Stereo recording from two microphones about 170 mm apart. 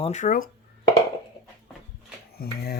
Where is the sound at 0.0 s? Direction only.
45° left (ahead or behind).